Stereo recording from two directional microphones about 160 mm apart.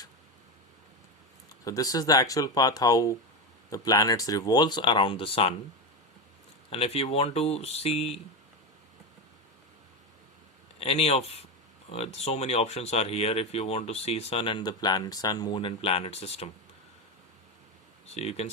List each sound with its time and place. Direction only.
1.6 s speech: 20° left (ahead or behind)
6.7 s speech: 35° left (ahead or behind)
10.8 s speech: 40° left (ahead or behind)
18.1 s speech: 40° left (ahead or behind)